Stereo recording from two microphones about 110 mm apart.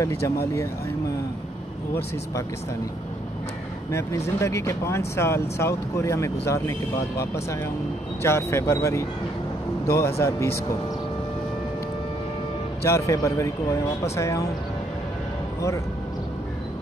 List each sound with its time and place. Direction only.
0.0 s speech: 25° left (ahead or behind)
3.9 s speech: 25° left (ahead or behind)
12.8 s speech: 25° left (ahead or behind)